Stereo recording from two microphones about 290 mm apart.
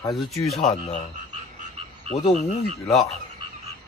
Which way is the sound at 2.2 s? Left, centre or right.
Left.